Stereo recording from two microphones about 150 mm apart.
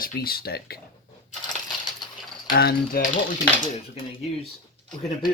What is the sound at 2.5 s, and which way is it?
Speech, 90° left.